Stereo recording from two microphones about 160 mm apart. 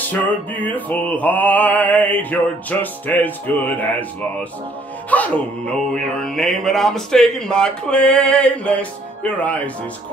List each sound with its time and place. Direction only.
0.6 s mantra: 10° left (ahead or behind)
5.1 s speech: 10° left (ahead or behind)